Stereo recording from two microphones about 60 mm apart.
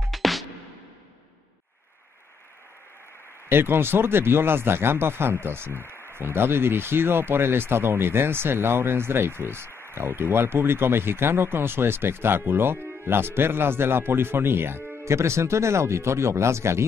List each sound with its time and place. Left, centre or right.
0.0 s music: centre
3.4 s speech: right